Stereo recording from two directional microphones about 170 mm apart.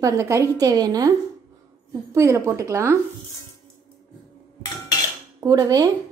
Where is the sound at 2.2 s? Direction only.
15° right (ahead or behind).